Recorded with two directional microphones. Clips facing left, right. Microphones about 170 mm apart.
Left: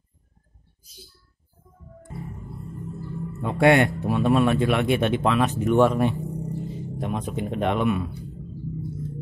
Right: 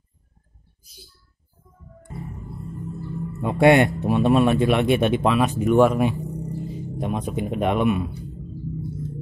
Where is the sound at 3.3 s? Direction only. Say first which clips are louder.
Right 2 dB; 20° right (ahead or behind).